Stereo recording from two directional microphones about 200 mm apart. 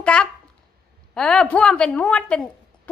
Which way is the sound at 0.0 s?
5° left (ahead or behind).